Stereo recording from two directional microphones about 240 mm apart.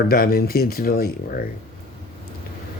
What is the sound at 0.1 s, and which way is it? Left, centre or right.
Speech, left.